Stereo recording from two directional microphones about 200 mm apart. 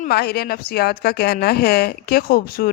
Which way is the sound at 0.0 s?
50° left (ahead or behind).